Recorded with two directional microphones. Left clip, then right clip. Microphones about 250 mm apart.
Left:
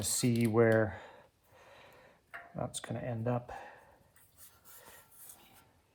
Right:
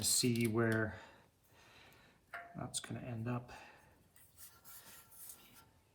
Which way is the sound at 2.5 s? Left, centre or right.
Left.